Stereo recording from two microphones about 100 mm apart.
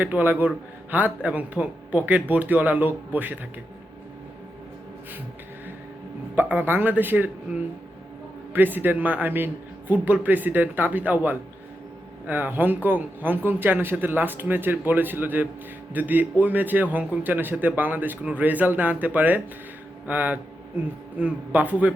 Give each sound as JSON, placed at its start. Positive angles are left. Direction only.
{"t": 0.0, "sound": "a man's voice", "side_deg": -15}
{"t": 6.3, "sound": "speech", "side_deg": -20}
{"t": 8.5, "sound": "a man's voice", "side_deg": -20}